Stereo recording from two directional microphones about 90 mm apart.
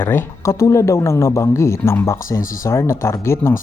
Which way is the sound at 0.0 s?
25° left (ahead or behind).